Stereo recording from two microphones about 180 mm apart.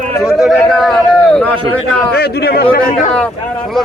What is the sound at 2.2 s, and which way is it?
Speech, 60° left (ahead or behind).